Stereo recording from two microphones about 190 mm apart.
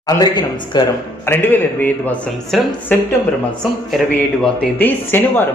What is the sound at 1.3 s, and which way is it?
A man's voice, 10° left (ahead or behind).